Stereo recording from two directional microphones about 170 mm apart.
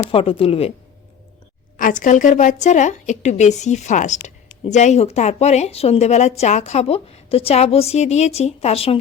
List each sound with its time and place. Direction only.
0.1 s speech: 35° left (ahead or behind)
1.7 s a woman's voice: 50° left (ahead or behind); by 9.0 s 35° left (ahead or behind)